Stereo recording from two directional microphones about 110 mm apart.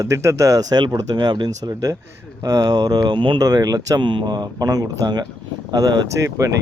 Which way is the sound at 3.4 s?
35° right (ahead or behind).